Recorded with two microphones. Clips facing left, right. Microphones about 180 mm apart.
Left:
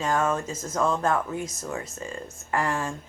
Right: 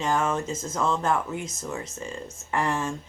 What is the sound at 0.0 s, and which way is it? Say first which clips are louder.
Speech: even; 20° right (ahead or behind).